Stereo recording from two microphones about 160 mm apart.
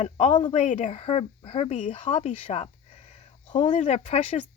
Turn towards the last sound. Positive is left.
turn(degrees=40)  # may be behind; listen again after turning